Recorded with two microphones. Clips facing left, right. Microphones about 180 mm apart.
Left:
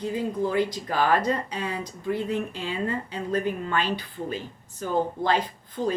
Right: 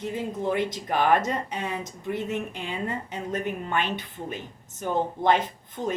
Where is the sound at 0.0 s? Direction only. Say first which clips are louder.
Left 2 dB; 20° right (ahead or behind).